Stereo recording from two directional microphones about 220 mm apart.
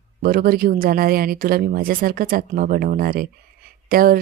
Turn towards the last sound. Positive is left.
turn(degrees=-40)  # may be behind; listen again after turning